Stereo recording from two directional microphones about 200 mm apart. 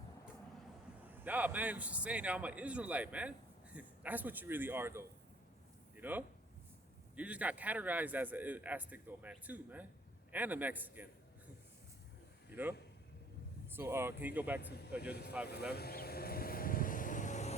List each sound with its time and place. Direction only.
1.0 s a man's voice: 10° right (ahead or behind)
12.5 s a man's voice: 10° right (ahead or behind)
15.7 s vehicle: 50° left (ahead or behind); by 17.6 s 35° left (ahead or behind)